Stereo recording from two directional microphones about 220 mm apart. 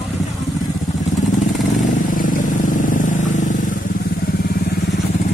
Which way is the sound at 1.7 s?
40° left (ahead or behind).